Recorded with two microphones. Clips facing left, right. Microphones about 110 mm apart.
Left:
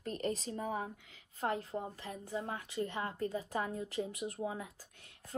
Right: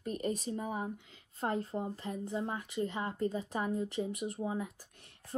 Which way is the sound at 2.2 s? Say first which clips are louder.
Right 1 dB; 20° right (ahead or behind).